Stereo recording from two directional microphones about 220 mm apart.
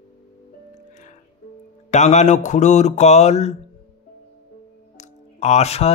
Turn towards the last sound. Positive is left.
turn(degrees=30)  # may be behind; listen again after turning